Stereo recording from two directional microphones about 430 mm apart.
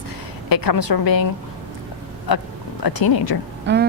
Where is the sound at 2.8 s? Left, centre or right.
Left.